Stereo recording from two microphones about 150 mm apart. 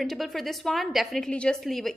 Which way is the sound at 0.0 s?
Centre (ahead or behind).